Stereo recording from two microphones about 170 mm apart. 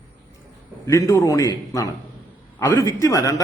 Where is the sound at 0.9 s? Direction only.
15° left (ahead or behind).